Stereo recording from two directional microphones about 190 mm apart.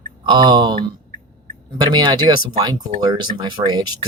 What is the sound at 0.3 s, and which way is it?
Speech, 25° right (ahead or behind).